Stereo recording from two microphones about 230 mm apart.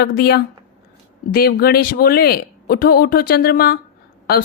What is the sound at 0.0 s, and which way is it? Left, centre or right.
Speech, left.